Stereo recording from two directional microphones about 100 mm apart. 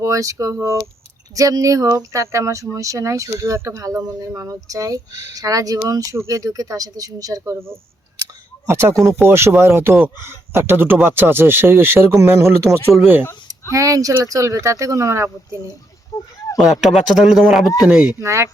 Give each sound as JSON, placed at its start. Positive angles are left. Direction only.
{"t": 0.0, "sound": "speech", "side_deg": -35}
{"t": 8.6, "sound": "speech", "side_deg": -25}
{"t": 16.1, "sound": "speech", "side_deg": 35}
{"t": 16.8, "sound": "speech", "side_deg": -5}
{"t": 18.2, "sound": "speech", "side_deg": -30}